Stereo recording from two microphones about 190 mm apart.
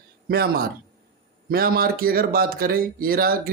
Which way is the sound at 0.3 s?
55° right (ahead or behind).